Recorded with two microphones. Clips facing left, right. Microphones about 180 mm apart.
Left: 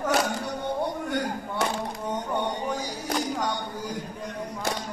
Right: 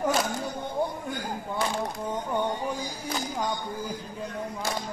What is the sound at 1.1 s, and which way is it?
Chop, 75° left (ahead or behind).